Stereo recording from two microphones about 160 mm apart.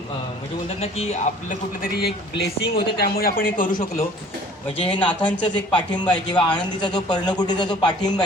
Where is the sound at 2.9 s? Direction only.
75° left (ahead or behind).